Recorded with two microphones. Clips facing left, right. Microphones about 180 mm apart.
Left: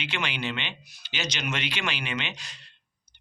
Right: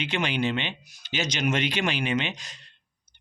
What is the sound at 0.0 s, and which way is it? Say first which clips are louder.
Speech: right 6 dB; 50° right (ahead or behind).